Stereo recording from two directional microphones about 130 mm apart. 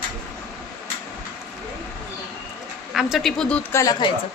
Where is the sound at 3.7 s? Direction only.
25° left (ahead or behind).